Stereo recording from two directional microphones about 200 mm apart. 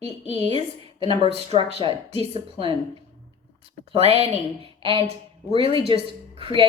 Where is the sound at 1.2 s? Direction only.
30° right (ahead or behind).